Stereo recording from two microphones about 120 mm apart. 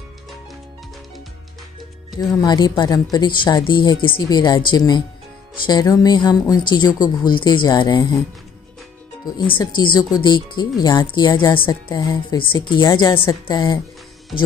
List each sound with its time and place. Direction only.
2.1 s speech: 35° left (ahead or behind)
9.2 s speech: 40° left (ahead or behind)